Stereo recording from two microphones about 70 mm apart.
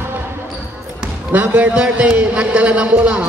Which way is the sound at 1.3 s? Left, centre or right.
Right.